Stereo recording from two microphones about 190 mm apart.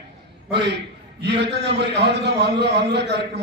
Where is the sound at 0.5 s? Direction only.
60° right (ahead or behind).